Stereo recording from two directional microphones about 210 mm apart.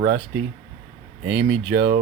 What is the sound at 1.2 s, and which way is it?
Speech, 50° right (ahead or behind).